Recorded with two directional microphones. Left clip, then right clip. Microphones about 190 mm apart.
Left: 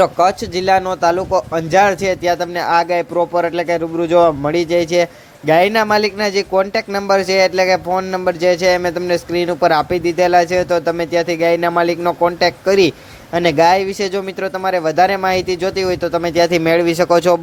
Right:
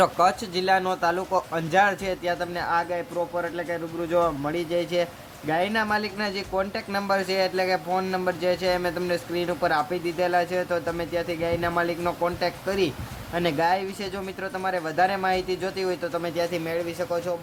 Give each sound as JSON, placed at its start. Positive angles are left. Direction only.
{"t": 0.0, "sound": "speech", "side_deg": 25}